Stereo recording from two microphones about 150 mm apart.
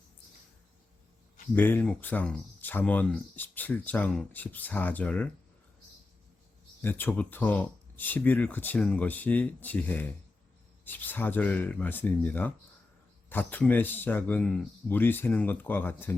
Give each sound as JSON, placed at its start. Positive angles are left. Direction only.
{"t": 1.5, "sound": "speech", "side_deg": 15}
{"t": 6.8, "sound": "speech", "side_deg": 15}